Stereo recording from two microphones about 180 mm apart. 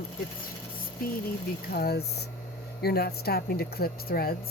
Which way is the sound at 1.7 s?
60° left (ahead or behind).